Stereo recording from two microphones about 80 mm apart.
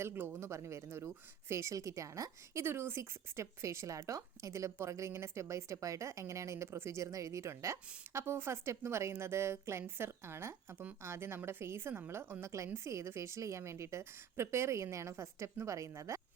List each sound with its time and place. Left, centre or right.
0.0 s speech: right